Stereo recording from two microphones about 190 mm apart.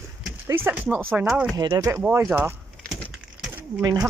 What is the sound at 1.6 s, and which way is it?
Speech, 20° right (ahead or behind).